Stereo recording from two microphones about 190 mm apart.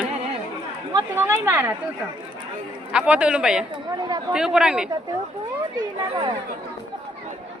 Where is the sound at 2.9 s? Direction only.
5° right (ahead or behind).